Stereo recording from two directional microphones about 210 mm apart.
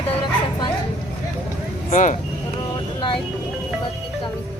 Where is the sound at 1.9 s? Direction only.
35° left (ahead or behind).